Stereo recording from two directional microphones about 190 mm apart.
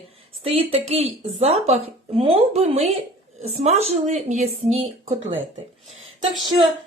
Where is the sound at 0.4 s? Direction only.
30° right (ahead or behind).